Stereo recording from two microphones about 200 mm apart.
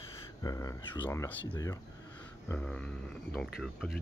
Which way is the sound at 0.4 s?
15° left (ahead or behind).